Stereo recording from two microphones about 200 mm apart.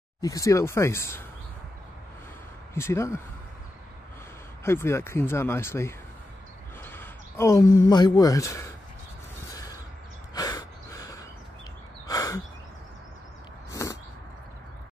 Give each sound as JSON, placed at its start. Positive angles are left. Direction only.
{"t": 0.2, "sound": "speech", "side_deg": 15}
{"t": 2.7, "sound": "speech", "side_deg": 15}
{"t": 4.6, "sound": "speech", "side_deg": 10}
{"t": 9.5, "sound": "mechanisms", "side_deg": 15}
{"t": 10.3, "sound": "snort", "side_deg": 20}
{"t": 12.1, "sound": "a sound", "side_deg": 15}
{"t": 13.7, "sound": "a sound", "side_deg": 15}